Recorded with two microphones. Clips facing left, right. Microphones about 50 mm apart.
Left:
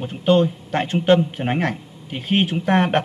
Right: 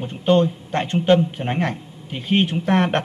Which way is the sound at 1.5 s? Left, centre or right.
Left.